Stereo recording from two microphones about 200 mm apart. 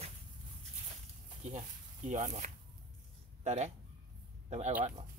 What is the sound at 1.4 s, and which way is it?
Speech, 35° right (ahead or behind).